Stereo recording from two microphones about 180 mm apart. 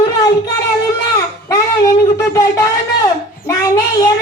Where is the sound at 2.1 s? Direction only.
20° left (ahead or behind).